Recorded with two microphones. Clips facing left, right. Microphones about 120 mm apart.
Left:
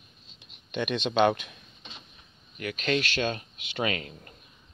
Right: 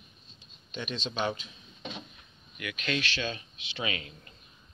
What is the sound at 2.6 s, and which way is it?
Speech, 40° left (ahead or behind).